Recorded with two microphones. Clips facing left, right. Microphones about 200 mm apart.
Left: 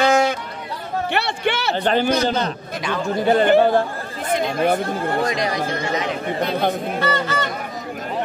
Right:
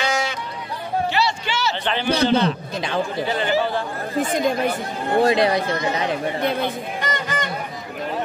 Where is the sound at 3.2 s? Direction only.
55° left (ahead or behind).